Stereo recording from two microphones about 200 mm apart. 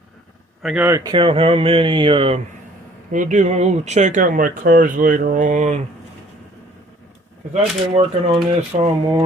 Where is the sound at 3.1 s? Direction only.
40° right (ahead or behind).